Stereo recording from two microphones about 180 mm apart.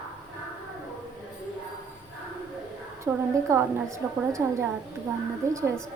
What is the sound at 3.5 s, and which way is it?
A woman's voice, 15° right (ahead or behind).